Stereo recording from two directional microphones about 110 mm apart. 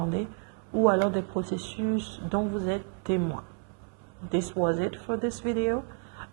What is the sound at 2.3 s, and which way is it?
Speech, 15° right (ahead or behind).